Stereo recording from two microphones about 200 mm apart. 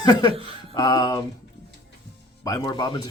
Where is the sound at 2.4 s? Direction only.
20° left (ahead or behind).